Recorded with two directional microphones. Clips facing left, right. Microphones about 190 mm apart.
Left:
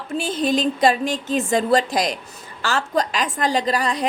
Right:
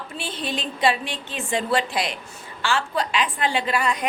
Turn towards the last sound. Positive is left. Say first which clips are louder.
# left 3 dB
turn(degrees=35)  # may be behind; listen again after turning